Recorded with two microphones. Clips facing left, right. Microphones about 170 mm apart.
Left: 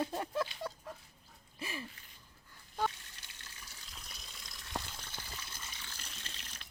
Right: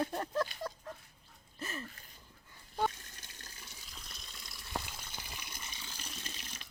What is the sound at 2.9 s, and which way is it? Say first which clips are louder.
Water: right 3 dB; 45° right (ahead or behind).